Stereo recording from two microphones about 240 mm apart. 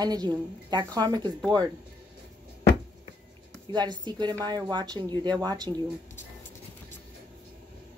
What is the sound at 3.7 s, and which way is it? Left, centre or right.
A woman's voice, centre.